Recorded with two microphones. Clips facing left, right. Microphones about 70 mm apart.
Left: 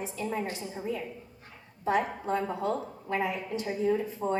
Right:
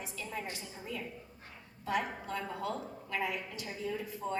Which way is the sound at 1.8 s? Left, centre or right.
Left.